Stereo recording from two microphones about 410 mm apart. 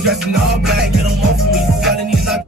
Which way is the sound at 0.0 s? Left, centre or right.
Centre.